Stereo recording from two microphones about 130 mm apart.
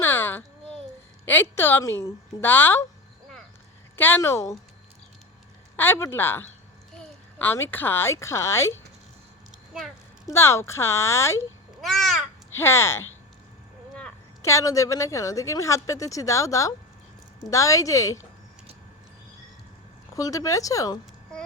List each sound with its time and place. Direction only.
0.0 s a sound: 15° left (ahead or behind)
1.2 s a woman's voice: 15° left (ahead or behind)
3.9 s speech: 15° left (ahead or behind)
5.7 s a woman's voice: 15° left (ahead or behind)
9.7 s a sound: centre (ahead or behind)
10.3 s speech: 20° left (ahead or behind)
11.8 s babbling: 5° left (ahead or behind)
12.5 s speech: 20° left (ahead or behind)
14.4 s speech: 25° left (ahead or behind)
20.1 s speech: 25° left (ahead or behind)